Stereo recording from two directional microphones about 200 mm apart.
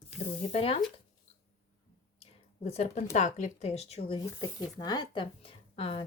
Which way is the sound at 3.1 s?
35° left (ahead or behind).